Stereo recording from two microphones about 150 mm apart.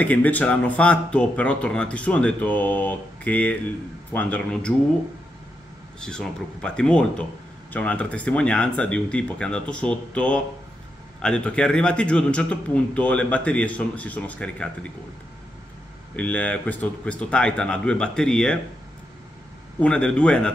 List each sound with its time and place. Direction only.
0.0 s a man's voice: 10° left (ahead or behind)
5.9 s a man's voice: 5° left (ahead or behind)
16.2 s a man's voice: 10° left (ahead or behind)
19.8 s a man's voice: 5° left (ahead or behind)